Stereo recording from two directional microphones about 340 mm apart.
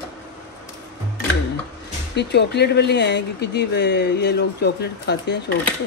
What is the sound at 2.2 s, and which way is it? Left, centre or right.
Speech, left.